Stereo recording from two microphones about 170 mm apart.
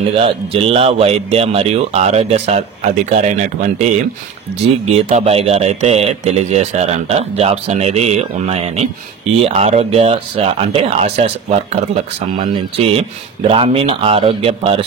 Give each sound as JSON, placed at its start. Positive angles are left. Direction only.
{"t": 0.1, "sound": "speech", "side_deg": -35}
{"t": 4.9, "sound": "speech", "side_deg": -35}